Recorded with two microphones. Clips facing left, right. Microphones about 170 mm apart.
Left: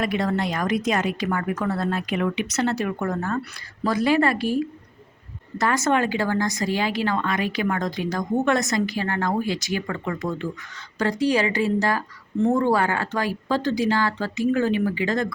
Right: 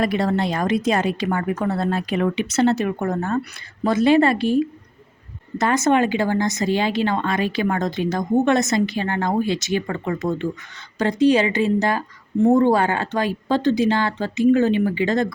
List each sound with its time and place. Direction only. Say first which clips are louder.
0.0 s speech: right 3 dB; 35° right (ahead or behind)